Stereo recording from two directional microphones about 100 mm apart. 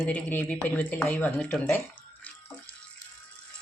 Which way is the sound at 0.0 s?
20° left (ahead or behind).